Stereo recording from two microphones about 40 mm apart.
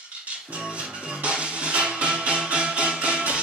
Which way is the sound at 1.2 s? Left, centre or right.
Right.